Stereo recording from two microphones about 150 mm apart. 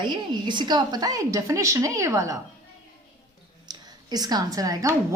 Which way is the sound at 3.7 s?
25° right (ahead or behind).